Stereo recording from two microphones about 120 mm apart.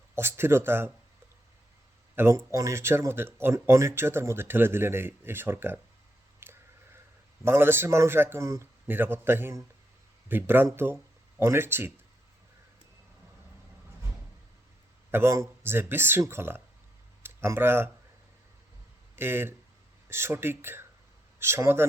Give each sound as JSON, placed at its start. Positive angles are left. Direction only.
{"t": 0.2, "sound": "speech", "side_deg": -20}
{"t": 2.1, "sound": "speech", "side_deg": -20}
{"t": 6.4, "sound": "a sound", "side_deg": -20}
{"t": 7.4, "sound": "speech", "side_deg": -20}
{"t": 15.1, "sound": "speech", "side_deg": -20}
{"t": 19.1, "sound": "speech", "side_deg": -20}